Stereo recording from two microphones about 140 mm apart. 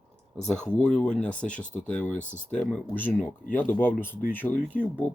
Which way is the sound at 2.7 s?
10° left (ahead or behind).